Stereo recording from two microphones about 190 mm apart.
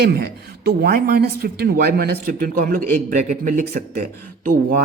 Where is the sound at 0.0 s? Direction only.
55° right (ahead or behind).